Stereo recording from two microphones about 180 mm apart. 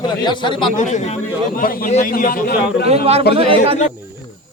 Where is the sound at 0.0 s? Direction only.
25° left (ahead or behind).